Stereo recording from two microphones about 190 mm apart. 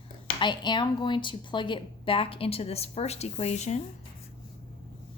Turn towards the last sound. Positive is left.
turn(degrees=35)  # may be behind; listen again after turning